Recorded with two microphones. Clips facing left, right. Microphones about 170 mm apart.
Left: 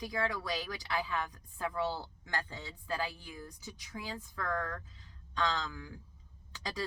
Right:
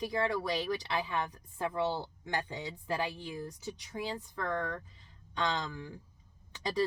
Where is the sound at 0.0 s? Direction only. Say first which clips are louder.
Right 4 dB; 25° right (ahead or behind).